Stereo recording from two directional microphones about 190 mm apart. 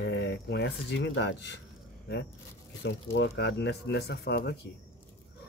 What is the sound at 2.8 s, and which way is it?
Speech, 65° left (ahead or behind).